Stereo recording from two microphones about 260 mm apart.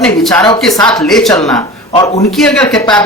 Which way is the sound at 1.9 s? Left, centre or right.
Centre.